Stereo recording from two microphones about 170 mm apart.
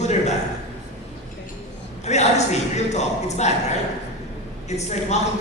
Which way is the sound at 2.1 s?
40° left (ahead or behind).